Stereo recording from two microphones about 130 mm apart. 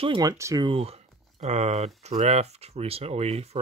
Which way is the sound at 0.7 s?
50° right (ahead or behind).